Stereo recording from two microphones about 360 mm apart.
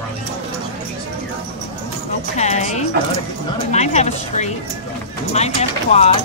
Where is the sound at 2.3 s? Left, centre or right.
Centre.